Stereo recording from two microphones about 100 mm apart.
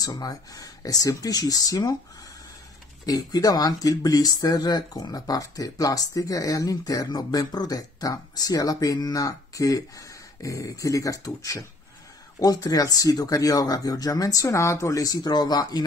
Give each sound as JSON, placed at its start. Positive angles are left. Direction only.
{"t": 0.0, "sound": "speech", "side_deg": 40}
{"t": 3.1, "sound": "speech", "side_deg": 40}